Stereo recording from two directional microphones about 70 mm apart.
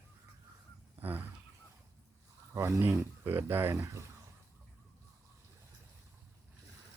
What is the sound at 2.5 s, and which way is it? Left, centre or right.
Speech, right.